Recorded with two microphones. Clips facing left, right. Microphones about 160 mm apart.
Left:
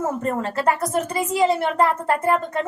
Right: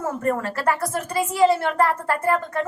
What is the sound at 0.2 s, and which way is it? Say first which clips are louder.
Speech: even; 20° left (ahead or behind).